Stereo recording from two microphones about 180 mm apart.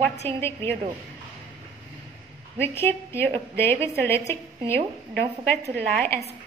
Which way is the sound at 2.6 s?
10° left (ahead or behind).